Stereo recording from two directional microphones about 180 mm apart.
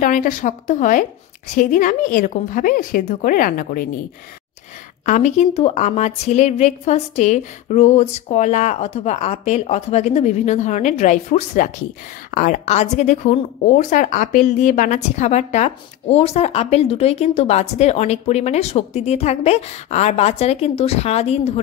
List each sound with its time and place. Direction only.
0.0 s a woman's voice: 45° left (ahead or behind)
5.0 s speech: 40° left (ahead or behind)